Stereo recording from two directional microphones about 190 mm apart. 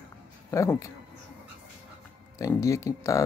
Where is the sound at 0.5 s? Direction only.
15° left (ahead or behind).